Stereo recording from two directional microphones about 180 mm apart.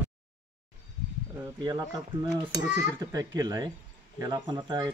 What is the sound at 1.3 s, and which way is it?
A child's voice, 20° right (ahead or behind).